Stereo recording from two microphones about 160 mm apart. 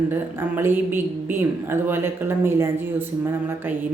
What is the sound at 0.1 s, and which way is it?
Speech, 15° right (ahead or behind).